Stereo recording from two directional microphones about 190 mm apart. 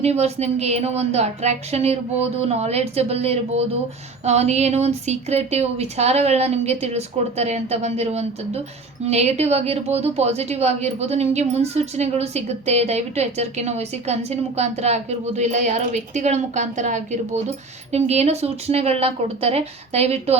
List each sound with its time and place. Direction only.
0.0 s a woman's voice: 35° right (ahead or behind)